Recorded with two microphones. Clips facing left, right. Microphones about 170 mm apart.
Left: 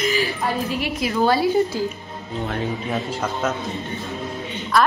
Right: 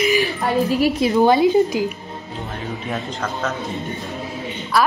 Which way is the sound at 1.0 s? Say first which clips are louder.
Right 3 dB; 20° right (ahead or behind).